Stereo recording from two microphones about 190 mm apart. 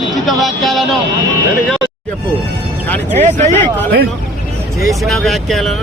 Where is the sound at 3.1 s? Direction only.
40° right (ahead or behind).